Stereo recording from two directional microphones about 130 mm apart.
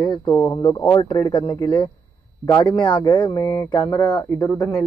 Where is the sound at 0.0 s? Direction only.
30° left (ahead or behind).